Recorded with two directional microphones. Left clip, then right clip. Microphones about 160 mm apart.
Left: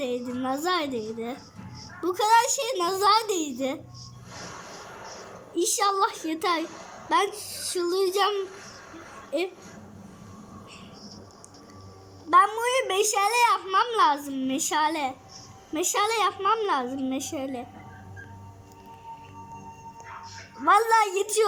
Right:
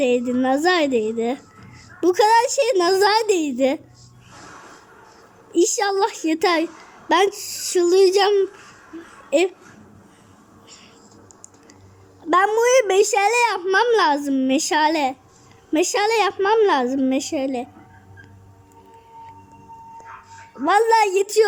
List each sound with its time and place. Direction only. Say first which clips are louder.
0.0 s a child's voice: right 11 dB; 35° right (ahead or behind)
5.5 s a child's voice: right 5 dB; 35° right (ahead or behind)
12.3 s a child's voice: right 5 dB; 40° right (ahead or behind)
20.7 s a child's voice: right 4 dB; 30° right (ahead or behind)